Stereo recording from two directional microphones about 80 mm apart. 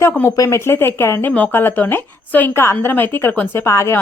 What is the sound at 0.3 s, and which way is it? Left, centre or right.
A woman's voice, left.